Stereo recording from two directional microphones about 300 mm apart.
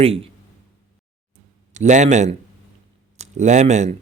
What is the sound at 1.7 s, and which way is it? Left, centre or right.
Speech, right.